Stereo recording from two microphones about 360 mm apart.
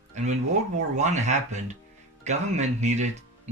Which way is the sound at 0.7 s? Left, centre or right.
Centre.